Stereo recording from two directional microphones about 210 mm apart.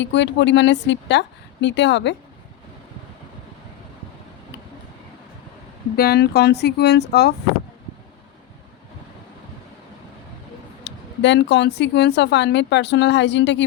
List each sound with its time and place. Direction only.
0.0 s speech: 55° left (ahead or behind)
6.0 s speech: 50° left (ahead or behind)
10.8 s speech: 55° left (ahead or behind)